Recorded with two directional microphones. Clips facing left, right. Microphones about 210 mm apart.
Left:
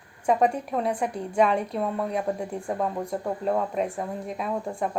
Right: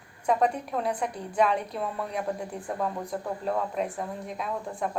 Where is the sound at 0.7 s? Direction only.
Centre (ahead or behind).